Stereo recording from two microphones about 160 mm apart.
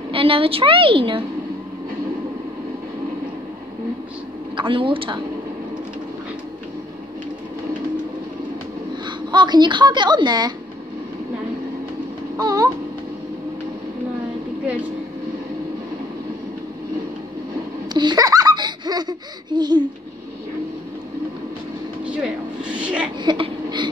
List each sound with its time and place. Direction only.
0.1 s a woman's voice: 35° right (ahead or behind)
4.6 s a woman's voice: 30° right (ahead or behind)
9.0 s speech: 30° right (ahead or behind)
12.4 s a sound: 25° right (ahead or behind)
17.9 s laughter: 25° right (ahead or behind)
22.0 s vehicle: 5° right (ahead or behind)
23.2 s a sound: 30° right (ahead or behind)